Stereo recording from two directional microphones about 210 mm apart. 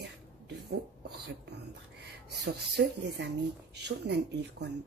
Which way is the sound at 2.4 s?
55° right (ahead or behind).